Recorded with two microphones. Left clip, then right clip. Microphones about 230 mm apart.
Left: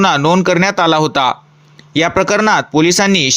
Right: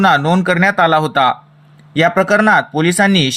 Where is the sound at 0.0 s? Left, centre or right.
Left.